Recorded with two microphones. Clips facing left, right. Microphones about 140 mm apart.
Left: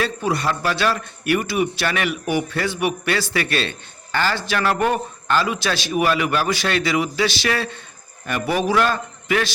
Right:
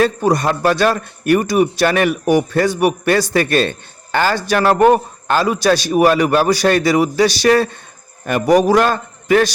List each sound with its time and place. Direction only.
0.0 s a man's voice: 45° right (ahead or behind)